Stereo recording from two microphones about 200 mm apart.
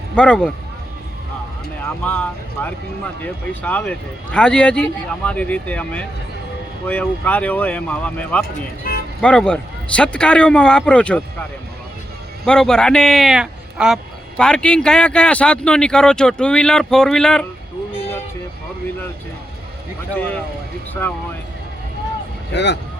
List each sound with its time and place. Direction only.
0.2 s speech: 5° left (ahead or behind)
2.0 s a man's voice: 10° left (ahead or behind)
8.9 s music: 45° left (ahead or behind)
9.2 s speech: 5° left (ahead or behind)
12.5 s speech: 5° left (ahead or behind)
22.5 s speech: 60° left (ahead or behind)